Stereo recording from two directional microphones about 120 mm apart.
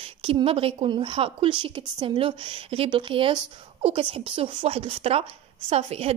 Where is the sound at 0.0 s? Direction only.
50° right (ahead or behind).